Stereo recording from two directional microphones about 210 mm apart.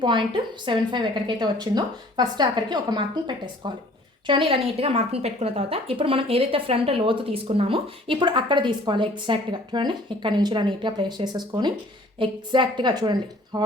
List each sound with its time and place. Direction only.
0.0 s a woman's voice: 20° right (ahead or behind)